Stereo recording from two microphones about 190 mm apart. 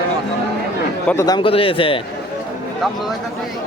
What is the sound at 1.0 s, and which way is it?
Speech, 15° left (ahead or behind).